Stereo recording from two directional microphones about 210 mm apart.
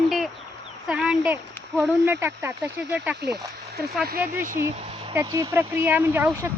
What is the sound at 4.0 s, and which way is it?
Speech, 45° right (ahead or behind).